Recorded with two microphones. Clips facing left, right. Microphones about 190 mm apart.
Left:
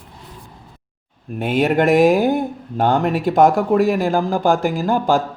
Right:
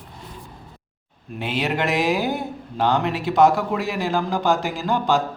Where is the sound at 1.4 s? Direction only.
50° left (ahead or behind).